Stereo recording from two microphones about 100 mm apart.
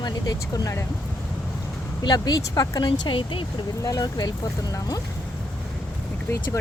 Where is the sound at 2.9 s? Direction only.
55° left (ahead or behind).